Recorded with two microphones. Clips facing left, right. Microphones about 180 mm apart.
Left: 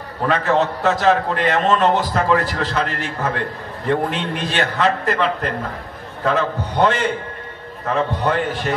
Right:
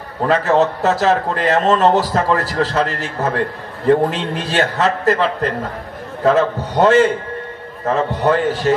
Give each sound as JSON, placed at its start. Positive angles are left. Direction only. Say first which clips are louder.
{"t": 0.3, "sound": "a man's voice", "louder": "right 4 dB", "side_deg": -35}